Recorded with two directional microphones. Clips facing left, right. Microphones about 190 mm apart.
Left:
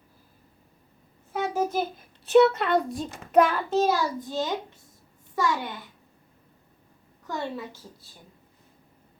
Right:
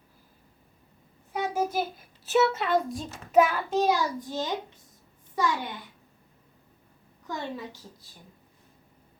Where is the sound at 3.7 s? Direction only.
15° right (ahead or behind).